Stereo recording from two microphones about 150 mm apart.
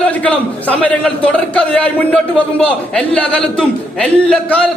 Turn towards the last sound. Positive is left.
turn(degrees=5)  # may be behind; listen again after turning